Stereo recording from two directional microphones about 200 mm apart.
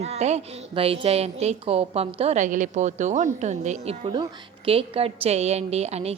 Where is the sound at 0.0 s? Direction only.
30° right (ahead or behind).